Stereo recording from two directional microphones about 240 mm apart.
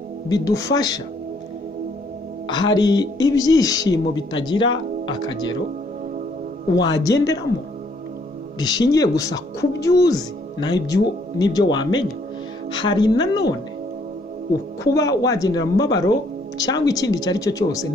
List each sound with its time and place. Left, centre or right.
0.3 s speech: centre
2.4 s speech: centre
6.7 s speech: centre
8.5 s speech: centre
15.0 s speech: centre